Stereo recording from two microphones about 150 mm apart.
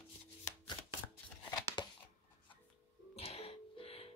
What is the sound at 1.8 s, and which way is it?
Chopping, 30° left (ahead or behind).